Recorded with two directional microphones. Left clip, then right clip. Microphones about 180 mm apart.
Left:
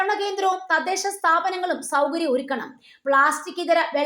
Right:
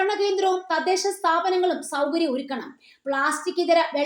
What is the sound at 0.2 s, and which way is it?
A woman's voice, 25° left (ahead or behind).